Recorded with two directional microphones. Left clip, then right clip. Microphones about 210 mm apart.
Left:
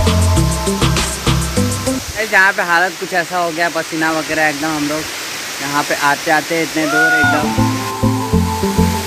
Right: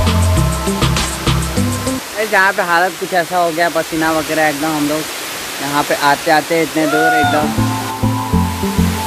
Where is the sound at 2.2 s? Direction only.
Centre (ahead or behind).